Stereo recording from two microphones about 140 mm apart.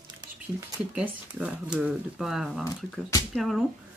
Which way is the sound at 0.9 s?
10° right (ahead or behind).